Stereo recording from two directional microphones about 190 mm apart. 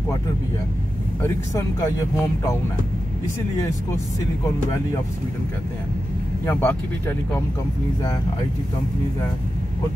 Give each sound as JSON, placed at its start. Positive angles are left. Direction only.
{"t": 1.2, "sound": "speech", "side_deg": 15}
{"t": 6.4, "sound": "speech", "side_deg": 10}